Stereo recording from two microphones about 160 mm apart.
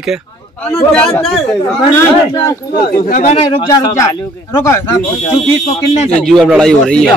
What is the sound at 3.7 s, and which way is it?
Speech, 25° left (ahead or behind).